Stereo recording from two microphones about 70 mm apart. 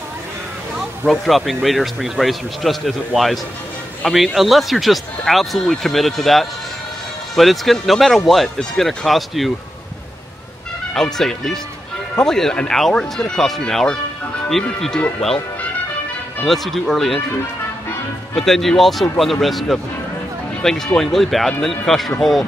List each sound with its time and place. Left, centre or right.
1.0 s a man's voice: centre
10.9 s speech: centre
15.0 s speech: centre
16.4 s speech: centre
18.3 s speech: centre